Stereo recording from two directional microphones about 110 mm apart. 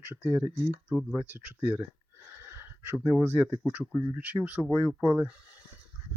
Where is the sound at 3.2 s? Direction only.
20° right (ahead or behind).